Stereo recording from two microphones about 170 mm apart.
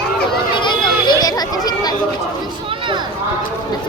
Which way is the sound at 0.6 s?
25° left (ahead or behind).